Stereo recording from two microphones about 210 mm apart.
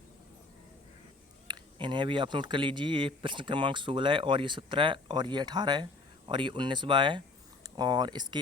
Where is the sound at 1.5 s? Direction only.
20° right (ahead or behind).